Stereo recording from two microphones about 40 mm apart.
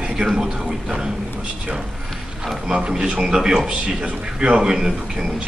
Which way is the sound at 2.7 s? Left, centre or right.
Right.